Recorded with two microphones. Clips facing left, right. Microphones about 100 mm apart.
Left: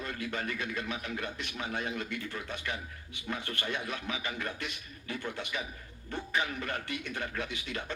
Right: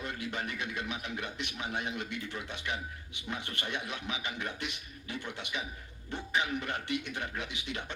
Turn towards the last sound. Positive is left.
turn(degrees=-20)  # may be behind; listen again after turning